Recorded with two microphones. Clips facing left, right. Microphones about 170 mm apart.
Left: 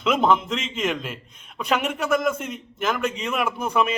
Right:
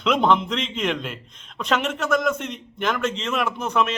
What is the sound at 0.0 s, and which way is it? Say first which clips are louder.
A man's voice: right 1 dB; 5° left (ahead or behind).